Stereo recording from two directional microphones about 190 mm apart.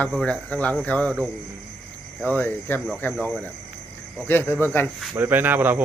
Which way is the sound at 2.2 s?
10° left (ahead or behind).